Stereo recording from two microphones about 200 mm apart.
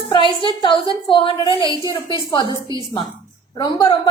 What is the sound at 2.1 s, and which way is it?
A woman's voice, 25° left (ahead or behind).